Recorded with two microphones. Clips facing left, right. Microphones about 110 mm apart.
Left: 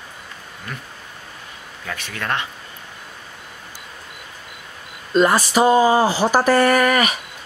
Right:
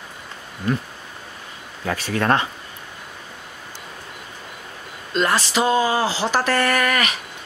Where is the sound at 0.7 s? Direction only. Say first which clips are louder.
Right 12 dB; 30° right (ahead or behind).